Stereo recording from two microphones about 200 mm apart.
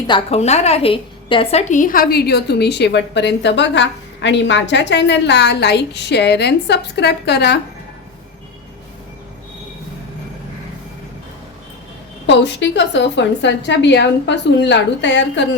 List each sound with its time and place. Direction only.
0.1 s a woman's voice: 30° left (ahead or behind); by 7.6 s 55° left (ahead or behind)
12.2 s a woman's voice: 60° left (ahead or behind)